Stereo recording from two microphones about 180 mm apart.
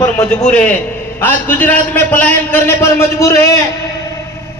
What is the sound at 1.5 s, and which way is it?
A man's voice, 10° left (ahead or behind).